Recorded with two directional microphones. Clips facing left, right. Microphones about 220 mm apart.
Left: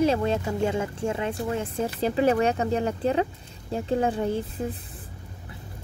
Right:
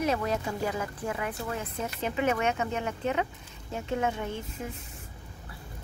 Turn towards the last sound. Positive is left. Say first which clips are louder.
# left 8 dB
turn(degrees=35)  # may be behind; listen again after turning